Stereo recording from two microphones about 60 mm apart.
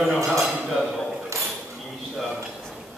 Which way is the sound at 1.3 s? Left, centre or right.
Right.